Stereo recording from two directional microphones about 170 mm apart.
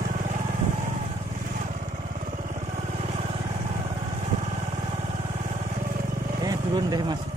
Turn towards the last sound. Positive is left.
turn(degrees=-25)  # may be behind; listen again after turning